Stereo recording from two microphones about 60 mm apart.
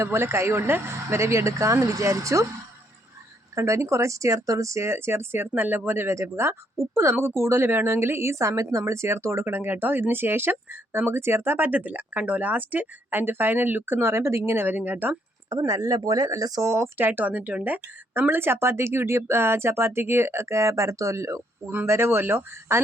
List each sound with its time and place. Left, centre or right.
0.0 s a woman's voice: right
3.5 s a woman's voice: right
15.4 s speech: right
16.6 s a woman's voice: right
17.0 s a woman's voice: right
21.8 s speech: right